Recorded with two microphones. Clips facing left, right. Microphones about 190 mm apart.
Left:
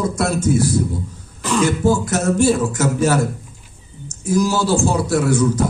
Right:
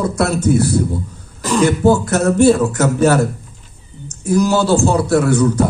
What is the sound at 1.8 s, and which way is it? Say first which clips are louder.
A man's voice: right 4 dB; 60° right (ahead or behind).